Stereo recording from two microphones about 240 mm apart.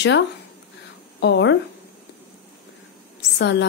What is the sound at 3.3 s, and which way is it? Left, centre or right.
Speech, left.